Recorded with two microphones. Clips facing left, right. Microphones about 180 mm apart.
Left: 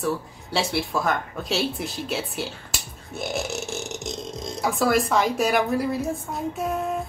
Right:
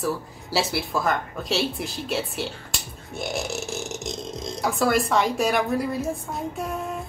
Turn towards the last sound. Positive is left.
turn(degrees=0)  # may be behind; listen again after turning